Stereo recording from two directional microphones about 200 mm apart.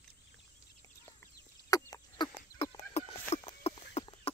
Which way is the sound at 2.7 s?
30° left (ahead or behind).